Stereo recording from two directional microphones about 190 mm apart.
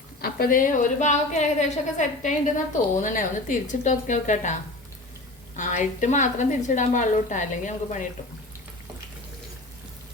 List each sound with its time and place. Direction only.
0.2 s a woman's voice: 50° left (ahead or behind)
5.5 s a woman's voice: 40° left (ahead or behind)